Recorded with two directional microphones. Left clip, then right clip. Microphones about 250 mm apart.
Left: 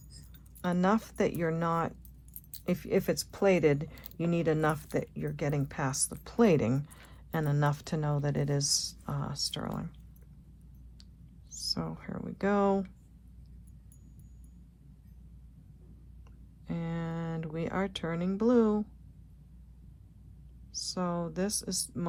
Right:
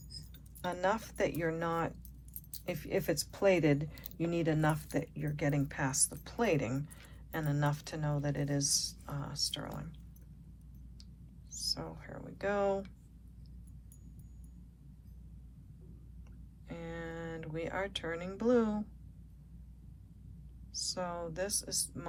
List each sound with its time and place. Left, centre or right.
0.6 s speech: left
11.5 s speech: left
16.6 s a sound: left
20.7 s speech: centre